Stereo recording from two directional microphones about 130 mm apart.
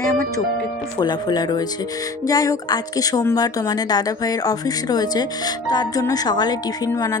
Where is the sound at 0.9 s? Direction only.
30° left (ahead or behind).